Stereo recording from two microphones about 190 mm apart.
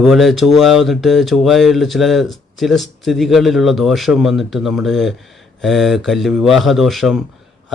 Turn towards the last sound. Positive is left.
turn(degrees=0)  # may be behind; listen again after turning